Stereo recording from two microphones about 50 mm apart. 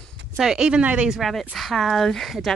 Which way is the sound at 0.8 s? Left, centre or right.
Right.